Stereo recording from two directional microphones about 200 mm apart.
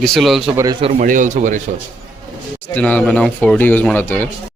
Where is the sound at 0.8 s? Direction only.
30° right (ahead or behind).